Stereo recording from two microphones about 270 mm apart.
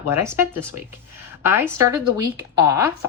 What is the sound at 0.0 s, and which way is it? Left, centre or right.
A woman's voice, centre.